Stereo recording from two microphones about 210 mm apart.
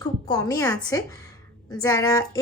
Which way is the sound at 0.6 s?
15° left (ahead or behind).